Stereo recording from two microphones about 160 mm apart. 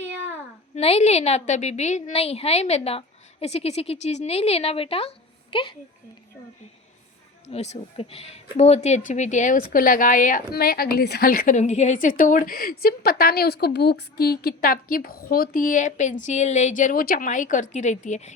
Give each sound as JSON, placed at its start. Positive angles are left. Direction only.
{"t": 0.8, "sound": "speech", "side_deg": 40}
{"t": 7.4, "sound": "a woman's voice", "side_deg": 45}